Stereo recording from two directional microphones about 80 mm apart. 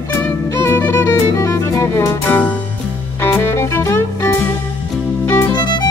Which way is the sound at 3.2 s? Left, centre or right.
Left.